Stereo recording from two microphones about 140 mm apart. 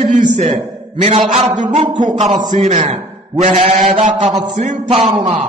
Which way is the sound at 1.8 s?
35° right (ahead or behind).